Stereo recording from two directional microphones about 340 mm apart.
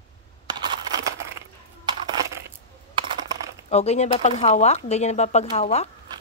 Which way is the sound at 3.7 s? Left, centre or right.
Centre.